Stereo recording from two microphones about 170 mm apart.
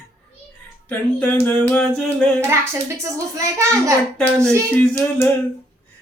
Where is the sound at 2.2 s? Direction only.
5° left (ahead or behind).